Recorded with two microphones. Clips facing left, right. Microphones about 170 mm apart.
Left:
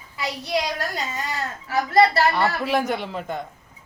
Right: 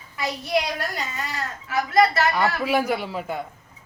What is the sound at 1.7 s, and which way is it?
Speech, 35° left (ahead or behind).